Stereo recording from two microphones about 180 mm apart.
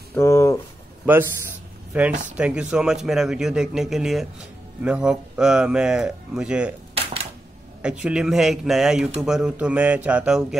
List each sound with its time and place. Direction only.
0.1 s a sound: 15° left (ahead or behind)
1.9 s a man's voice: 5° right (ahead or behind)
7.8 s a man's voice: 5° right (ahead or behind)